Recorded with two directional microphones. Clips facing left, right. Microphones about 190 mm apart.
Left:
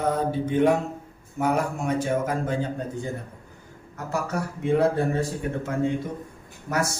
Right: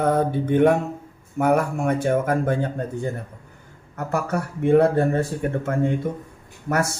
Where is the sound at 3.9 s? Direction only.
55° right (ahead or behind).